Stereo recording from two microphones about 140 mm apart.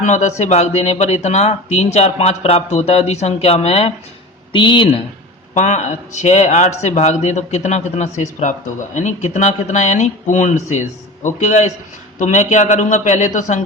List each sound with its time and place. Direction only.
0.0 s speech: 55° left (ahead or behind)
4.5 s speech: 35° left (ahead or behind)
5.5 s speech: 55° left (ahead or behind)